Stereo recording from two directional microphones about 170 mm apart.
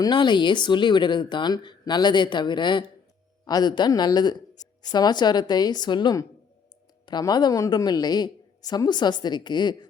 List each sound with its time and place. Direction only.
0.0 s speech: 25° left (ahead or behind)